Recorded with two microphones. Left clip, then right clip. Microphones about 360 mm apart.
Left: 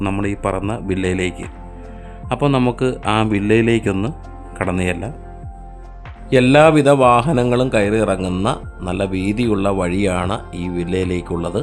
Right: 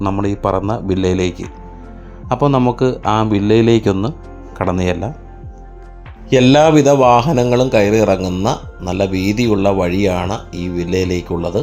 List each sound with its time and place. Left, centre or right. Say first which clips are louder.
0.0 s a man's voice: right 3 dB; centre
2.3 s a man's voice: right 3 dB; centre
6.3 s a man's voice: right 1 dB; centre
10.5 s speech: right 3 dB; left
11.3 s speech: right 3 dB; centre